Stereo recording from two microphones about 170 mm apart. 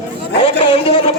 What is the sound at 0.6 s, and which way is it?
Speech, 35° left (ahead or behind).